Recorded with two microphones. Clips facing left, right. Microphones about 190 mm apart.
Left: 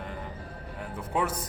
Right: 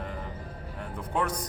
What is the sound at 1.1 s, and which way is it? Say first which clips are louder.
Speech: left 1 dB; 5° left (ahead or behind).